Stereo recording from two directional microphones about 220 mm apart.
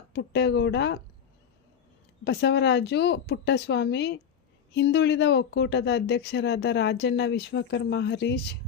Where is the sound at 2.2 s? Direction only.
50° left (ahead or behind).